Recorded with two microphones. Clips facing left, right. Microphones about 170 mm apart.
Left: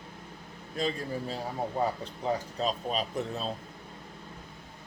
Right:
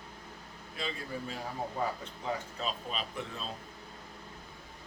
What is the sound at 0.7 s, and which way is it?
Speech, 40° left (ahead or behind).